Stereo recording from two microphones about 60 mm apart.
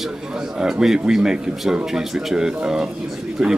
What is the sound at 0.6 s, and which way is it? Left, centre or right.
Speech, centre.